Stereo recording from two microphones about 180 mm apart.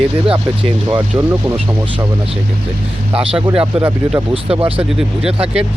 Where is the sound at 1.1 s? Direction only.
10° right (ahead or behind).